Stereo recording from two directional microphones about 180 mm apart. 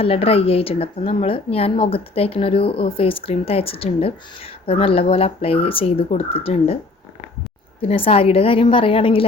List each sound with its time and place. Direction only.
0.0 s speech: 30° left (ahead or behind)
7.8 s speech: 30° left (ahead or behind)